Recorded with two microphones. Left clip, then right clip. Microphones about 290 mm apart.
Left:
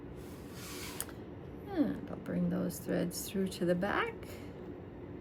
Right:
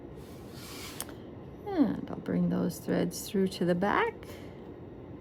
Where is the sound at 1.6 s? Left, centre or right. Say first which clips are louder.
Right 5 dB; right.